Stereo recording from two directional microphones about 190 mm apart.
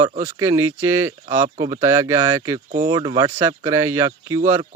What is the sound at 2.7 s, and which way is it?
Speech, 45° right (ahead or behind).